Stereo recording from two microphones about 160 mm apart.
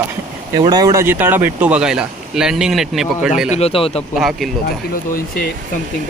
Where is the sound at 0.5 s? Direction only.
25° right (ahead or behind); by 3.5 s 5° right (ahead or behind).